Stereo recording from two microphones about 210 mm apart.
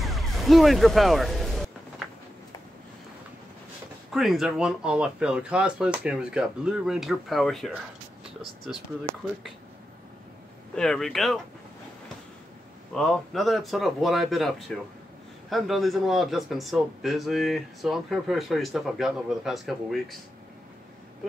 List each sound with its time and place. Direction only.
0.0 s music: centre (ahead or behind)
4.1 s speech: centre (ahead or behind)
10.8 s speech: centre (ahead or behind)
12.9 s speech: centre (ahead or behind)